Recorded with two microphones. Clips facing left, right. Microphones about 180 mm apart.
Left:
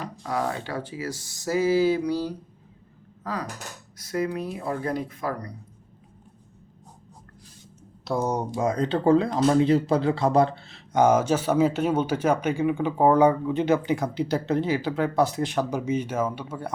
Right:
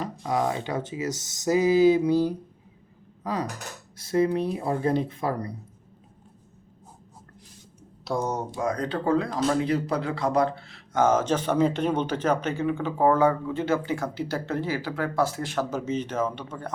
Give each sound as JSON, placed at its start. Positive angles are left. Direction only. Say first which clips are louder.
{"t": 0.2, "sound": "speech", "louder": "right 2 dB", "side_deg": -20}
{"t": 3.9, "sound": "speech", "louder": "right 4 dB", "side_deg": -25}
{"t": 8.0, "sound": "speech", "louder": "left 2 dB", "side_deg": 5}
{"t": 8.5, "sound": "speech", "louder": "left 4 dB", "side_deg": 25}
{"t": 11.0, "sound": "speech", "louder": "left 2 dB", "side_deg": 10}